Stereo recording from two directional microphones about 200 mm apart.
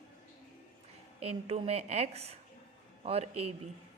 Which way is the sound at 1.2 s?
30° right (ahead or behind).